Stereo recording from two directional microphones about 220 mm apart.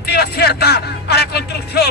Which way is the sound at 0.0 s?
45° left (ahead or behind).